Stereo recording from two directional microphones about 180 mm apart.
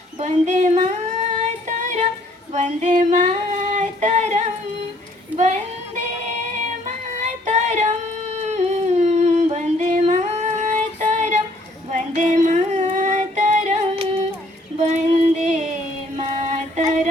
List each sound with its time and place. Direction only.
0.2 s a sound: 40° right (ahead or behind)
1.6 s music: 45° right (ahead or behind)
2.5 s female singing: 40° right (ahead or behind)
5.4 s speech: 40° right (ahead or behind)
6.8 s child singing: 40° right (ahead or behind)
14.8 s a sound: 40° right (ahead or behind)